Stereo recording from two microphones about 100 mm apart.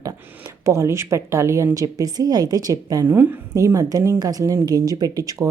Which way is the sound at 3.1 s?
20° right (ahead or behind).